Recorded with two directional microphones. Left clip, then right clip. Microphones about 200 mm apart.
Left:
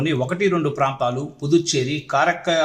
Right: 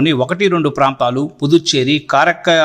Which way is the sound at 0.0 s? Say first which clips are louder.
Right 7 dB; 40° right (ahead or behind).